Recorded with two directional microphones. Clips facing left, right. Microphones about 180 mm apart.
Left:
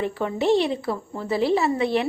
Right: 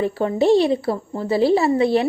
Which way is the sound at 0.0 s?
35° right (ahead or behind).